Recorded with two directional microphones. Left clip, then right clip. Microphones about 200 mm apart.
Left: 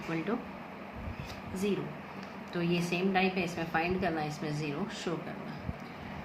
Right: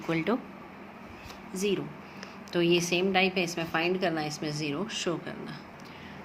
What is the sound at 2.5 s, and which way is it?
A woman's voice, 45° right (ahead or behind).